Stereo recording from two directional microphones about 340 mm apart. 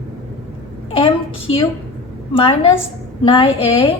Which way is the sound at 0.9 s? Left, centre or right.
Centre.